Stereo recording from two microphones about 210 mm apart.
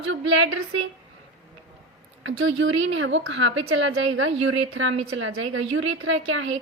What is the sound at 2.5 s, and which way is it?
A woman's voice, 65° right (ahead or behind).